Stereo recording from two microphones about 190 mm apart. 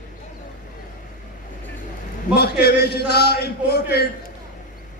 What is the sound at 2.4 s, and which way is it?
A man's voice, 55° left (ahead or behind).